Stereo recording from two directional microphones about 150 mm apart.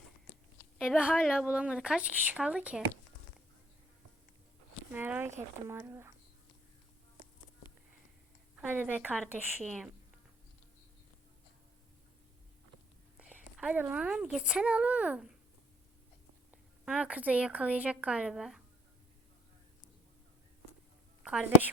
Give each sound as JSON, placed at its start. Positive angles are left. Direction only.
{"t": 1.0, "sound": "a woman's voice", "side_deg": -5}
{"t": 4.9, "sound": "a woman's voice", "side_deg": -10}
{"t": 8.5, "sound": "a woman's voice", "side_deg": -10}
{"t": 9.6, "sound": "a woman's voice", "side_deg": 0}
{"t": 13.1, "sound": "a woman's voice", "side_deg": -10}
{"t": 16.5, "sound": "a woman's voice", "side_deg": -10}
{"t": 21.2, "sound": "a woman's voice", "side_deg": -5}